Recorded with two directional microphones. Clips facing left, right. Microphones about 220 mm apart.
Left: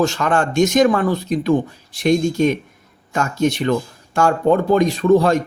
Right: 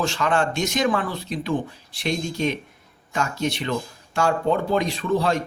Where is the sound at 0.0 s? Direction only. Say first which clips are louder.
Left 5 dB; 45° left (ahead or behind).